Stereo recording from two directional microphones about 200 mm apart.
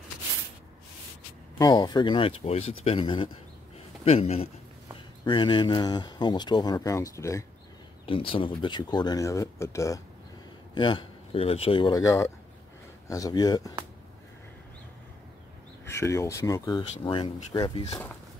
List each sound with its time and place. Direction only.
1.6 s speech: 20° left (ahead or behind)
8.1 s speech: 25° left (ahead or behind)
15.8 s speech: 15° left (ahead or behind)